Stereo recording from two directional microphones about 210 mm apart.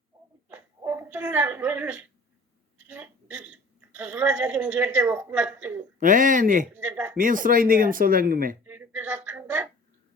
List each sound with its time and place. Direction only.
0.5 s a sound: 10° right (ahead or behind)
2.9 s a woman's voice: 5° right (ahead or behind)
6.0 s speech: 40° right (ahead or behind)
6.7 s speech: 5° right (ahead or behind)
7.2 s speech: 40° right (ahead or behind)
8.6 s a sound: 10° right (ahead or behind)